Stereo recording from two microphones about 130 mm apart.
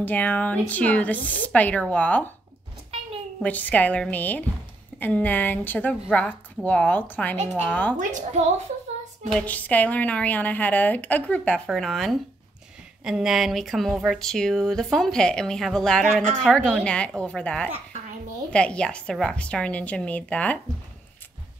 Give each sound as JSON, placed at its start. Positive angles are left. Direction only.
{"t": 0.0, "sound": "a woman's voice", "side_deg": 10}
{"t": 3.4, "sound": "a woman's voice", "side_deg": 10}
{"t": 8.0, "sound": "a woman's voice", "side_deg": -65}
{"t": 9.3, "sound": "a woman's voice", "side_deg": 10}